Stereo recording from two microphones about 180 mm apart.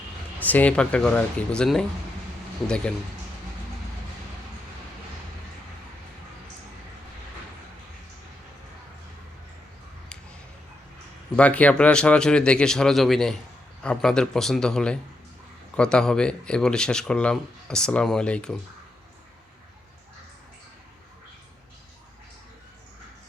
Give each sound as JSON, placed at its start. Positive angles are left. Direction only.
{"t": 0.3, "sound": "speech", "side_deg": 10}
{"t": 11.3, "sound": "speech", "side_deg": 5}